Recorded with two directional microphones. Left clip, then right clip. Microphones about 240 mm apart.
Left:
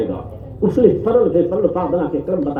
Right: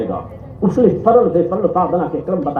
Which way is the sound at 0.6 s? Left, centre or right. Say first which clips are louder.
Right 1 dB; left.